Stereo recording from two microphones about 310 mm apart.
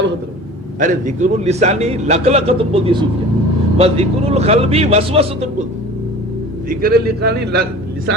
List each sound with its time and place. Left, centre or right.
0.8 s a man's voice: right
6.7 s a man's voice: right